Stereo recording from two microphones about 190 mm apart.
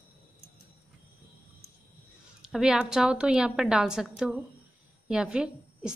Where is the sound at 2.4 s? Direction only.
5° right (ahead or behind).